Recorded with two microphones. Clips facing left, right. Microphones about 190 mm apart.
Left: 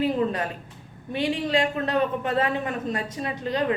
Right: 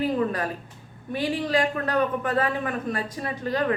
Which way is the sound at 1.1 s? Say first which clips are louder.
Even; 25° left (ahead or behind).